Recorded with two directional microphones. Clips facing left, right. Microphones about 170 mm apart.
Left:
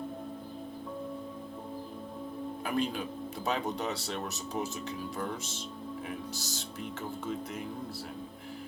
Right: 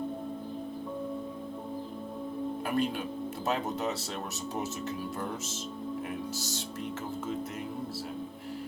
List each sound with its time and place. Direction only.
2.6 s speech: centre (ahead or behind)